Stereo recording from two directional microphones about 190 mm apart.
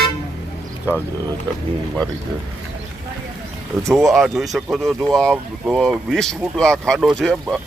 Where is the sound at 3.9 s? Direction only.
Centre (ahead or behind).